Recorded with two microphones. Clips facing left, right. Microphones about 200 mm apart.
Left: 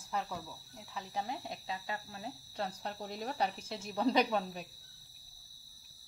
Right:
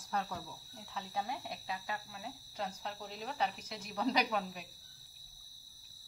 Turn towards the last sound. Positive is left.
turn(degrees=30)  # may be behind; listen again after turning